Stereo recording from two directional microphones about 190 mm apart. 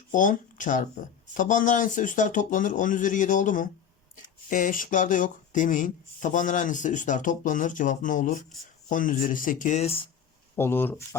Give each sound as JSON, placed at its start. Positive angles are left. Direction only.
{"t": 0.1, "sound": "speech", "side_deg": 45}
{"t": 10.5, "sound": "speech", "side_deg": 10}